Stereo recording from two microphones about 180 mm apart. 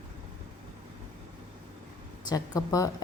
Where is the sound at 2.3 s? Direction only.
20° left (ahead or behind).